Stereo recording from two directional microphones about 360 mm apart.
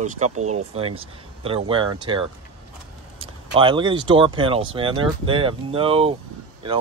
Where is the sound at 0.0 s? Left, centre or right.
Centre.